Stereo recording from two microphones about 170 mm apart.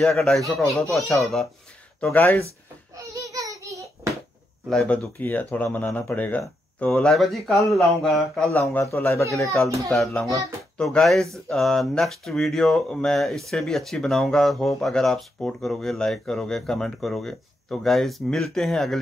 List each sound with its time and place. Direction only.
0.0 s speech: 5° left (ahead or behind)
3.0 s a sound: 20° right (ahead or behind)
4.6 s speech: 5° left (ahead or behind)
8.5 s speech: 15° left (ahead or behind)
9.8 s speech: centre (ahead or behind)